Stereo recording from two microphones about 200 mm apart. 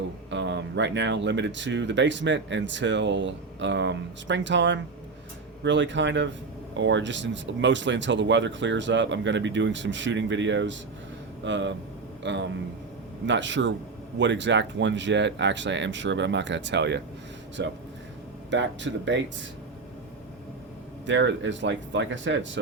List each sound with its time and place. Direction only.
0.3 s speech: 60° right (ahead or behind)
21.1 s speech: 65° right (ahead or behind)